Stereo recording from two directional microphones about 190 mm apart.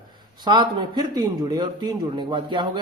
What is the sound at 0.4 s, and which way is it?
A man's voice, 25° right (ahead or behind).